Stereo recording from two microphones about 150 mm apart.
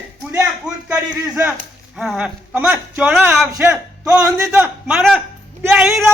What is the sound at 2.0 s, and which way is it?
A man's voice, 5° right (ahead or behind).